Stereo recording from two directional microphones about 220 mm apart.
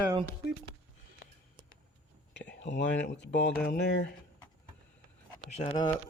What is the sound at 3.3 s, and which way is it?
Speech, 55° left (ahead or behind).